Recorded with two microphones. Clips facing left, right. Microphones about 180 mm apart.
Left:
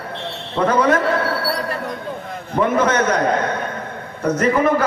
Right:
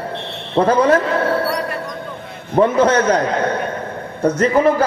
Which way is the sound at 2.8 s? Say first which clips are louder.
Right 3 dB; 30° right (ahead or behind).